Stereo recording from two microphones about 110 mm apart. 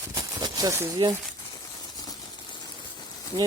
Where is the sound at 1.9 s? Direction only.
40° left (ahead or behind).